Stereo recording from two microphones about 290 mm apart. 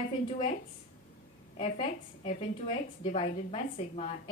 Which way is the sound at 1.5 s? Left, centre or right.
Left.